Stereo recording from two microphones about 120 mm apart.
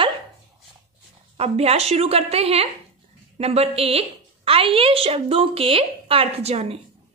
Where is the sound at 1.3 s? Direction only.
60° right (ahead or behind).